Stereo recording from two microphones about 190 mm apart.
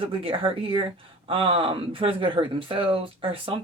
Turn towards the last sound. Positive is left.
turn(degrees=-30)  # may be behind; listen again after turning